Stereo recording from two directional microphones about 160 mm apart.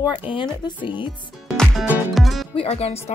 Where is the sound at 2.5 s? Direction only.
40° left (ahead or behind).